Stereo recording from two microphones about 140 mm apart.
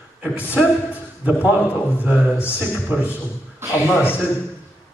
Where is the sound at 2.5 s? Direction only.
5° right (ahead or behind).